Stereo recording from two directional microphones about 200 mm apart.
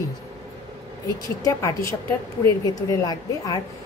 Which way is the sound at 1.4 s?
15° left (ahead or behind).